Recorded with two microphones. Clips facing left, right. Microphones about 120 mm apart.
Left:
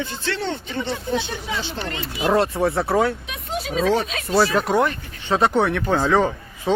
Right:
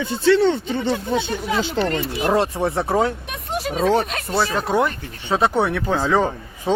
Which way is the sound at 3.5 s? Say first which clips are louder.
Even; 55° right (ahead or behind).